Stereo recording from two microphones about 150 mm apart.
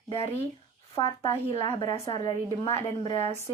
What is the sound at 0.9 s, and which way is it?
Speech, 25° left (ahead or behind).